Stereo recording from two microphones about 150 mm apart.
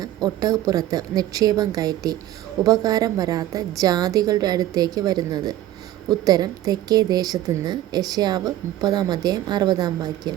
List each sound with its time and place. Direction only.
0.0 s a woman's voice: 25° right (ahead or behind)